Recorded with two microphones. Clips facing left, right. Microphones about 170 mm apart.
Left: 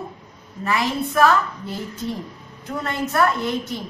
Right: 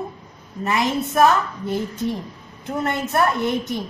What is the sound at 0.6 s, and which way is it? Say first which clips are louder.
A woman's voice: right 1 dB; 20° right (ahead or behind).